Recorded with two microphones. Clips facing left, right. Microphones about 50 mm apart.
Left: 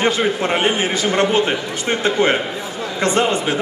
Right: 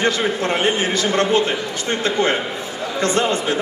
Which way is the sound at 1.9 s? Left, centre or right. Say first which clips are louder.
Left 3 dB; left.